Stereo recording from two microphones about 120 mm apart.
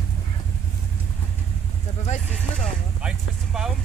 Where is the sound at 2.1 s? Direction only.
90° left.